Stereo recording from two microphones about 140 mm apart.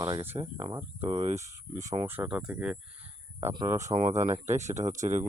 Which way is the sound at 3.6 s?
55° right (ahead or behind).